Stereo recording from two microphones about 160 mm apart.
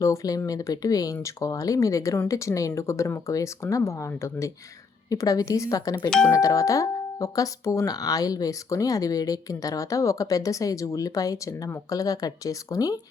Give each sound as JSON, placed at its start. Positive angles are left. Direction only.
{"t": 0.0, "sound": "speech", "side_deg": 20}
{"t": 6.1, "sound": "speech", "side_deg": 5}
{"t": 6.3, "sound": "speech", "side_deg": 20}